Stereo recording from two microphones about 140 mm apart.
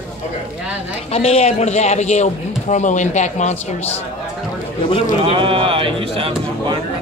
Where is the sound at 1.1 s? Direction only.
45° left (ahead or behind).